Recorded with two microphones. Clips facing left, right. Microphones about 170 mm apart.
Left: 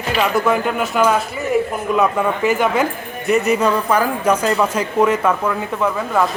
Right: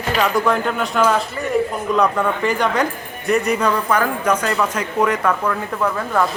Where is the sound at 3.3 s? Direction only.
20° left (ahead or behind).